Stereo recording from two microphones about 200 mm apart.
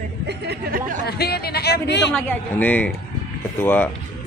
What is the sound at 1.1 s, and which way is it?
A woman's voice, 50° left (ahead or behind).